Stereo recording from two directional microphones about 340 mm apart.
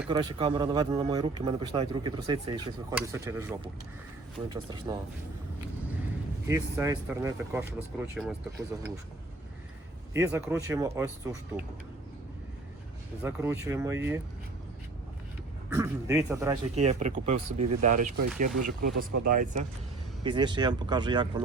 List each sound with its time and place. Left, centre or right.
0.0 s speech: centre
6.5 s speech: centre
10.2 s speech: centre
13.2 s speech: centre
15.7 s speech: centre